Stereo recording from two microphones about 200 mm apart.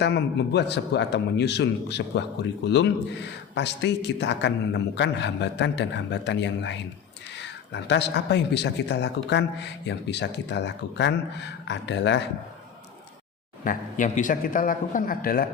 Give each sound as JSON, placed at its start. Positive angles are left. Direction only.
{"t": 0.0, "sound": "speech", "side_deg": 60}
{"t": 13.7, "sound": "a man's voice", "side_deg": 40}